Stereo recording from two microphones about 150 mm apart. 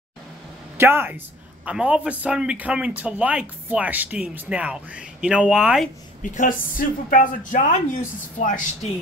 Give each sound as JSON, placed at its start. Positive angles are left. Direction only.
{"t": 0.7, "sound": "speech", "side_deg": -15}
{"t": 6.2, "sound": "a man's voice", "side_deg": 60}